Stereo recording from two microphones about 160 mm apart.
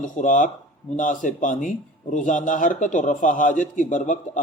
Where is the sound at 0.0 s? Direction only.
55° left (ahead or behind).